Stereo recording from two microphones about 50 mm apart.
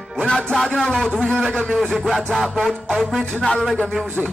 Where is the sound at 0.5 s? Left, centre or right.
Centre.